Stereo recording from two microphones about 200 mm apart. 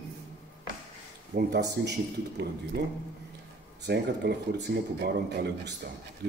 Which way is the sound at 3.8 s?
55° right (ahead or behind).